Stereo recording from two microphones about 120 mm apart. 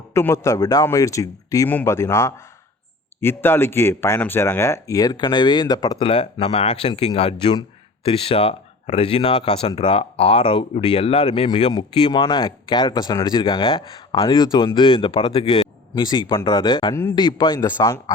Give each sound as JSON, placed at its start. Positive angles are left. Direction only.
{"t": 0.1, "sound": "speech", "side_deg": 20}
{"t": 6.0, "sound": "speech", "side_deg": 45}
{"t": 16.0, "sound": "speech", "side_deg": 35}
{"t": 16.9, "sound": "a man's voice", "side_deg": 20}
{"t": 17.2, "sound": "speech", "side_deg": 40}